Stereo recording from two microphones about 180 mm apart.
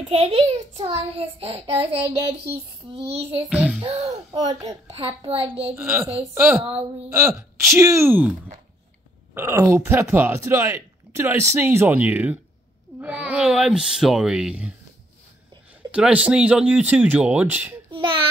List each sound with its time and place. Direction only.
0.1 s a child's voice: 35° right (ahead or behind)
3.4 s speech: 5° right (ahead or behind)
3.8 s a child's voice: 35° right (ahead or behind)
5.8 s speech: 10° right (ahead or behind)
15.9 s speech: 5° right (ahead or behind)
17.9 s a sound: 25° right (ahead or behind)